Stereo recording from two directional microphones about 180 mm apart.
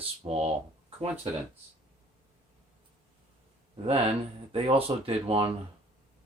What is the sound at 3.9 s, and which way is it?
Speech, 35° right (ahead or behind).